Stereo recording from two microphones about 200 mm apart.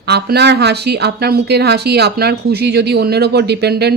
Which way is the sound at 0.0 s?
55° right (ahead or behind).